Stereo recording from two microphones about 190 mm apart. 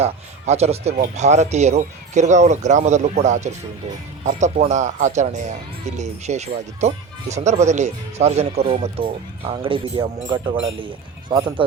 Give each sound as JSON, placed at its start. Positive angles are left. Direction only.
{"t": 0.0, "sound": "speech", "side_deg": -35}